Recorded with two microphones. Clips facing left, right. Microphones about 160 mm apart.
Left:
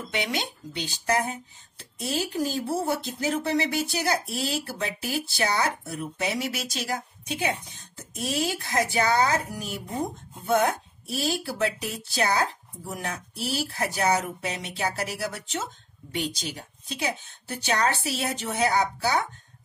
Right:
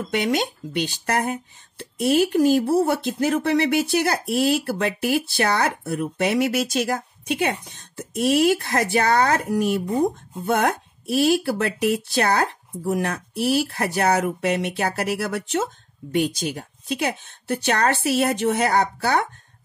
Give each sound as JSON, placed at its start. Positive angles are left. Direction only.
{"t": 0.1, "sound": "speech", "side_deg": -50}